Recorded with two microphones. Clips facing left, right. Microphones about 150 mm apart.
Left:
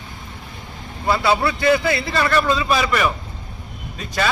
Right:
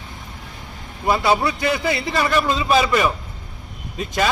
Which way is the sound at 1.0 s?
15° right (ahead or behind).